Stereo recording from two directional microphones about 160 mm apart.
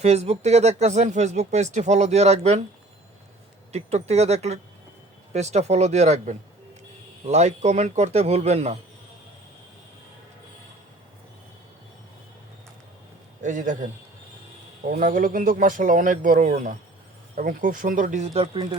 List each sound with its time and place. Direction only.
0.0 s speech: 40° right (ahead or behind)
3.7 s speech: 40° right (ahead or behind)
13.4 s speech: 50° right (ahead or behind)
14.8 s a man's voice: 55° right (ahead or behind); by 18.8 s 30° right (ahead or behind)